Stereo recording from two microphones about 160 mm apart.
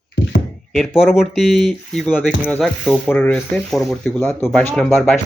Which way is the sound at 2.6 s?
Centre (ahead or behind).